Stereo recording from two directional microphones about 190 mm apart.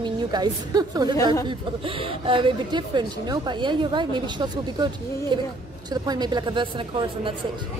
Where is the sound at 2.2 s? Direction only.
25° right (ahead or behind).